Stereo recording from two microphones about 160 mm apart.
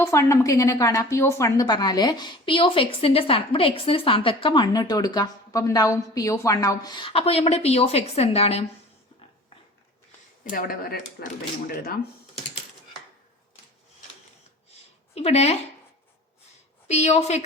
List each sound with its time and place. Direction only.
0.0 s a woman's voice: 15° left (ahead or behind); by 8.6 s 40° left (ahead or behind)
10.5 s speech: 65° left (ahead or behind)
11.7 s speech: 70° left (ahead or behind)
14.7 s a sound: 40° left (ahead or behind)
16.9 s a woman's voice: 45° left (ahead or behind)